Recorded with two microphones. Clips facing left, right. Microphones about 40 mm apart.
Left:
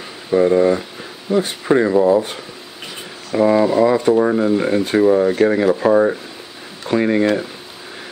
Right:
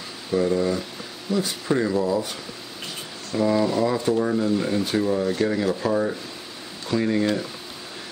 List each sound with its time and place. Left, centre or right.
0.3 s speech: left
3.3 s speech: left